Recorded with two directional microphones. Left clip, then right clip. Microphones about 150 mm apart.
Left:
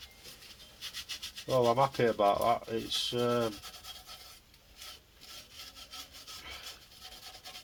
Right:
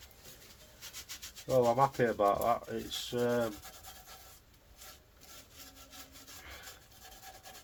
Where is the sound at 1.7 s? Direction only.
55° left (ahead or behind).